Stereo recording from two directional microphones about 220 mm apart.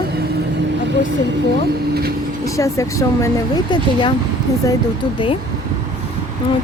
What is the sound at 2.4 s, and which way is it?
Speech, 15° left (ahead or behind).